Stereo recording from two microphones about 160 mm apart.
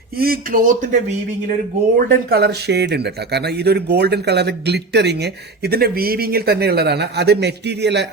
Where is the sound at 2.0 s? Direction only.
75° right (ahead or behind).